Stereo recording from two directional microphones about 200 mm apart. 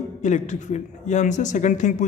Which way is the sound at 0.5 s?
35° left (ahead or behind).